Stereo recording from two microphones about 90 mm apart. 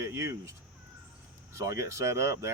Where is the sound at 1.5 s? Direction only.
35° right (ahead or behind).